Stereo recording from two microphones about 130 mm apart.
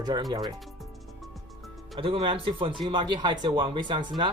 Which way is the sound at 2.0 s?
45° right (ahead or behind).